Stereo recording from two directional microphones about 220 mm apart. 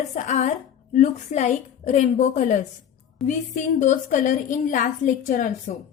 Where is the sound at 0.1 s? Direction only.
30° left (ahead or behind).